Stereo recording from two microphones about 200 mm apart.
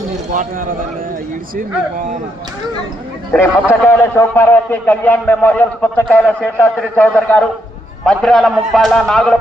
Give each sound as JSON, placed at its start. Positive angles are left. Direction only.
{"t": 0.3, "sound": "a man's voice", "side_deg": -40}
{"t": 3.3, "sound": "a man's voice", "side_deg": 10}